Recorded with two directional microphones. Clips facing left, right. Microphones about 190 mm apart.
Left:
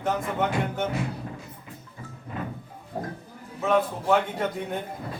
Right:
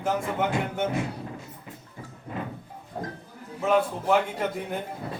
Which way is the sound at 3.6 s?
5° right (ahead or behind).